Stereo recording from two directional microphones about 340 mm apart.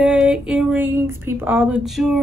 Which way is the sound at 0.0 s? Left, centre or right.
Centre.